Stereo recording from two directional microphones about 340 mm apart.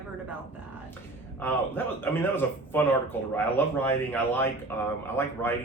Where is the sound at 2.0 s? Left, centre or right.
Centre.